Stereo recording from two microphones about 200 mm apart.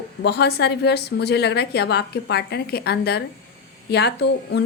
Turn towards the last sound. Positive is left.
turn(degrees=55)  # may be behind; listen again after turning